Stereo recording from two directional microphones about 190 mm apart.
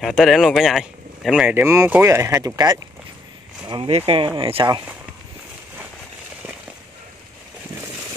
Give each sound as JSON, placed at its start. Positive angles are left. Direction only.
{"t": 0.0, "sound": "speech", "side_deg": 0}